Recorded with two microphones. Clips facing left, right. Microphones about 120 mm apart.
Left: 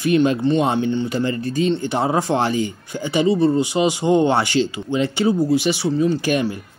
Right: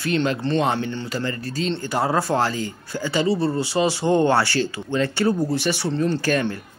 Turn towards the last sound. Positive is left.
turn(degrees=15)  # may be behind; listen again after turning